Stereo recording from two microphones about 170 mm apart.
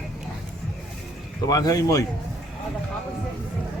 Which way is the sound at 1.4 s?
20° left (ahead or behind).